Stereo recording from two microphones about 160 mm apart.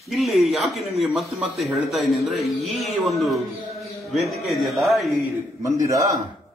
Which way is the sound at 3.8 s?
Centre (ahead or behind).